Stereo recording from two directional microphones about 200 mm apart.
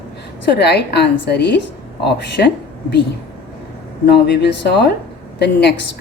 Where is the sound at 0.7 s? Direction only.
55° left (ahead or behind).